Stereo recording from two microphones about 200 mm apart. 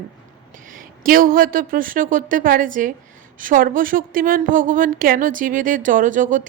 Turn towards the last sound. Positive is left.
turn(degrees=-40)  # may be behind; listen again after turning